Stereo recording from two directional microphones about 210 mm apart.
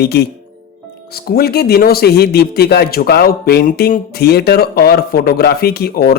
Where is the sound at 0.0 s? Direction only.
50° left (ahead or behind).